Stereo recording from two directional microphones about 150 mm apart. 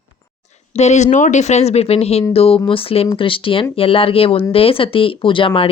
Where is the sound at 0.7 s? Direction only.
50° left (ahead or behind).